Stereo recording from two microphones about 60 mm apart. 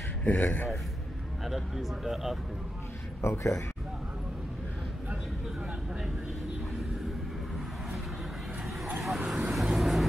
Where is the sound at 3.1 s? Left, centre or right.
Left.